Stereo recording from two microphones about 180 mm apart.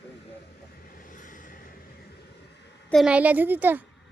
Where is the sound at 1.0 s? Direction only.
45° left (ahead or behind).